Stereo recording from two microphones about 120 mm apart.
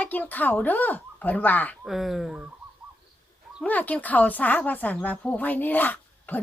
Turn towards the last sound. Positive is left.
turn(degrees=15)  # may be behind; listen again after turning